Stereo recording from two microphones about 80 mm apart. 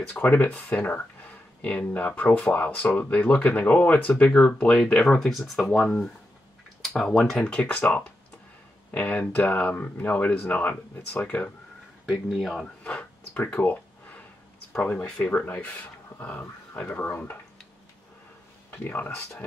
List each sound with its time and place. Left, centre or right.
0.1 s speech: left
12.1 s speech: centre
12.8 s a sound: centre
15.2 s speech: centre
18.7 s speech: left